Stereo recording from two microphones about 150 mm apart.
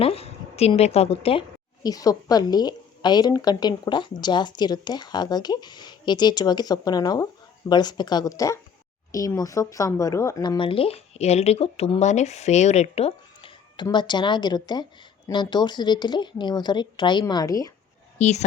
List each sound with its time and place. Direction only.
0.0 s a woman's voice: 40° left (ahead or behind)
1.8 s a woman's voice: 25° left (ahead or behind)
10.6 s a woman's voice: 40° left (ahead or behind)
18.2 s a woman's voice: 50° left (ahead or behind)